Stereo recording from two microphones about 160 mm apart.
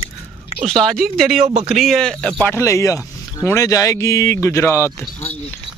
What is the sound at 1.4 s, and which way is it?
Speech, 40° right (ahead or behind).